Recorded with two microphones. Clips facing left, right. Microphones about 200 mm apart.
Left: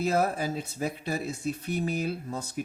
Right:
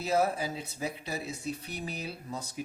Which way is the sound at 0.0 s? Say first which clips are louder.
Left 2 dB; 50° left (ahead or behind).